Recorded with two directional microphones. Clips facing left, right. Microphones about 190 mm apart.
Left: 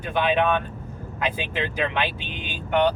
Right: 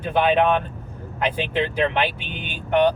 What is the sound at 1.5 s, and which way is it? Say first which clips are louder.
Speech: right 7 dB; 30° right (ahead or behind).